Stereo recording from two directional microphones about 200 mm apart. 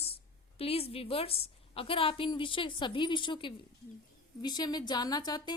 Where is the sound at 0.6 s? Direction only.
30° left (ahead or behind).